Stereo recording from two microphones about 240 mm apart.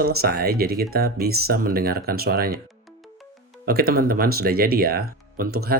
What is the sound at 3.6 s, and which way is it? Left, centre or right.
Speech, right.